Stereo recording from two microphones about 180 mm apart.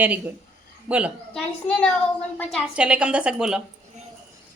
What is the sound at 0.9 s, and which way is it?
Speech, 5° right (ahead or behind).